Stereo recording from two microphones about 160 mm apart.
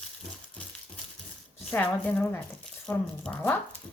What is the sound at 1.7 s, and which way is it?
Speech, 10° left (ahead or behind).